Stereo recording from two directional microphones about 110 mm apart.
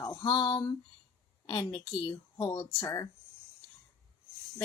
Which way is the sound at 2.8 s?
25° left (ahead or behind).